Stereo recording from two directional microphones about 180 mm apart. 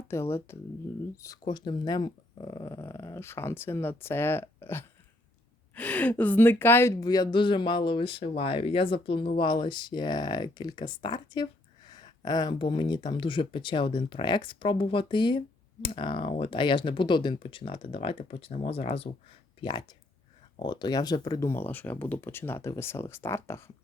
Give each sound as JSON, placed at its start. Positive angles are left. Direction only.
{"t": 0.1, "sound": "speech", "side_deg": 15}